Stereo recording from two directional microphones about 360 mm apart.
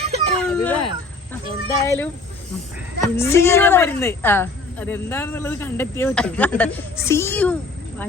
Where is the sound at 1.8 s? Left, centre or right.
Centre.